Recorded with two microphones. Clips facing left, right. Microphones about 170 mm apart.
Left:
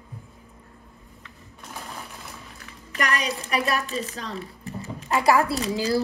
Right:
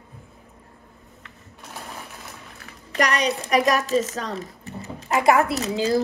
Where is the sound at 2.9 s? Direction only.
35° right (ahead or behind).